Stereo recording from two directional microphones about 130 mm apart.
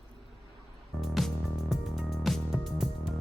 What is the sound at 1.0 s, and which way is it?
Music, centre (ahead or behind).